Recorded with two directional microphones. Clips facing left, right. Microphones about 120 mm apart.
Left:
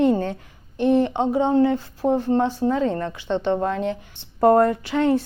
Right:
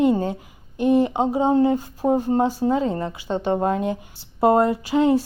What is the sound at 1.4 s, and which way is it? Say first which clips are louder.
Speech: even; 40° right (ahead or behind).